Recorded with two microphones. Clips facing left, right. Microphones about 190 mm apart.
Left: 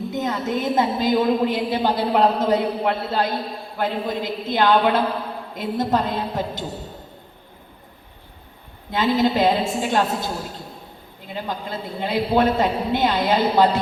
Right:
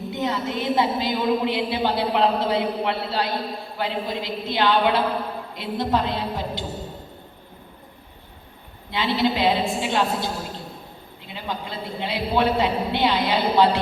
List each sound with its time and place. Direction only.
0.1 s a woman's voice: 45° left (ahead or behind)
8.9 s a woman's voice: 45° left (ahead or behind)
11.3 s a woman's voice: 45° left (ahead or behind)